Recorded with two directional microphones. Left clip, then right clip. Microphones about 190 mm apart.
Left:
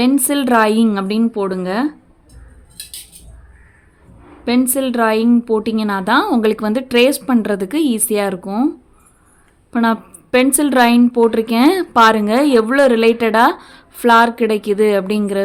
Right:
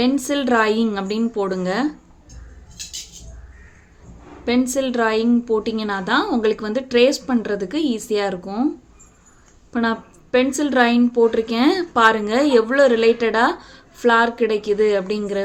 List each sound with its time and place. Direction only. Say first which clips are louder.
0.0 s a woman's voice: left 4 dB; 35° left (ahead or behind)
4.4 s a woman's voice: left 3 dB; 30° left (ahead or behind)
9.7 s a woman's voice: left 5 dB; 30° left (ahead or behind)